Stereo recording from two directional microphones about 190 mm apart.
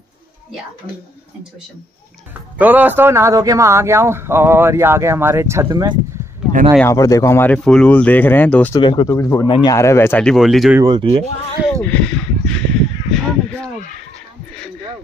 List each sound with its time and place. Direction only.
2.6 s speech: 10° right (ahead or behind)
6.8 s speech: 15° left (ahead or behind)
8.7 s speech: 20° left (ahead or behind); by 10.8 s centre (ahead or behind)
10.8 s speech: 25° right (ahead or behind)
11.7 s a sound: 5° left (ahead or behind)